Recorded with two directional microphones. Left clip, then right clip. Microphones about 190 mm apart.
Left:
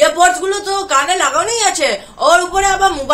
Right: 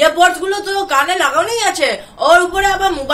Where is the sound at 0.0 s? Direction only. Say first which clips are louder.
Even; 10° left (ahead or behind).